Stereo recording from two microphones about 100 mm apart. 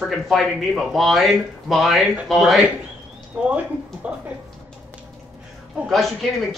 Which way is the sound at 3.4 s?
15° right (ahead or behind).